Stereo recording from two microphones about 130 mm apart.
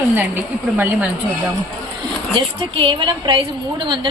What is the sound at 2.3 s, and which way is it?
A woman's voice, 40° right (ahead or behind).